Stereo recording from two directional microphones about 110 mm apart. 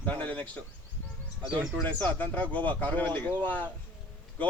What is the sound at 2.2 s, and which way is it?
Speech, 15° left (ahead or behind).